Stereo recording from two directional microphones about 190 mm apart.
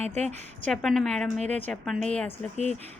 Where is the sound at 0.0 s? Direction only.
35° right (ahead or behind).